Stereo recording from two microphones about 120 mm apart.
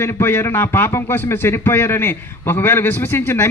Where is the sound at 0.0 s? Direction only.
20° left (ahead or behind).